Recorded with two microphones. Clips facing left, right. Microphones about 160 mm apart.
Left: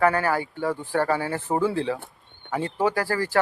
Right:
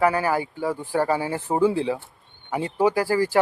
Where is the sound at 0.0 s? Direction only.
10° right (ahead or behind).